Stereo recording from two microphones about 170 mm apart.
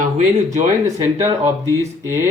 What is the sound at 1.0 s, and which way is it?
Speech, 15° right (ahead or behind).